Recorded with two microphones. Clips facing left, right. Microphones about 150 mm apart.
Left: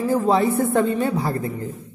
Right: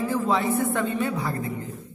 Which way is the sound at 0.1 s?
35° left (ahead or behind).